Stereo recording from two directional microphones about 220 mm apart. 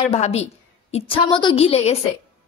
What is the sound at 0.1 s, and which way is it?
A woman's voice, 30° left (ahead or behind).